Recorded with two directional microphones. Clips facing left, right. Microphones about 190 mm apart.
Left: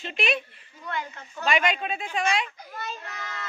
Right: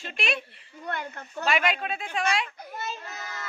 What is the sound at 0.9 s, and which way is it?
Speech, 55° right (ahead or behind).